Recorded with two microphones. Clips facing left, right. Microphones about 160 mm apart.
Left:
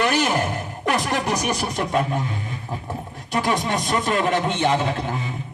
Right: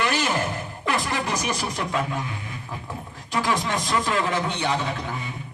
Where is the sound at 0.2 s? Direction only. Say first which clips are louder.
Left 4 dB; 40° left (ahead or behind).